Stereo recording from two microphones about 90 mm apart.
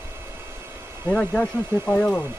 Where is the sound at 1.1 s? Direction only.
15° left (ahead or behind).